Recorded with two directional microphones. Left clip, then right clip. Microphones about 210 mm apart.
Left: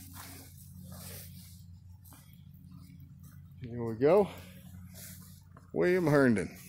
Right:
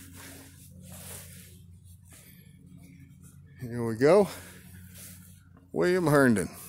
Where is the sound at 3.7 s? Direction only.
40° right (ahead or behind).